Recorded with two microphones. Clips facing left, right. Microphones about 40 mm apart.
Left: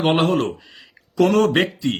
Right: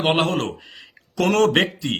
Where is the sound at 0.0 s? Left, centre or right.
Right.